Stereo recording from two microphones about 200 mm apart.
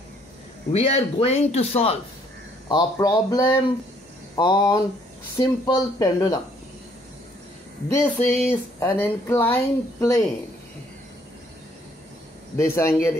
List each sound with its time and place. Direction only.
0.7 s a man's voice: 30° left (ahead or behind)
7.9 s speech: 10° left (ahead or behind)
12.5 s speech: 15° left (ahead or behind)